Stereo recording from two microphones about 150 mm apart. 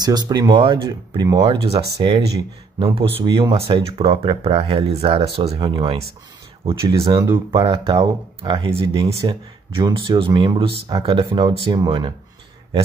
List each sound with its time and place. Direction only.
0.0 s speech: 25° right (ahead or behind)